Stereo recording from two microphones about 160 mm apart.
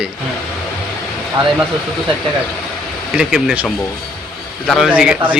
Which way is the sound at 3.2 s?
5° right (ahead or behind).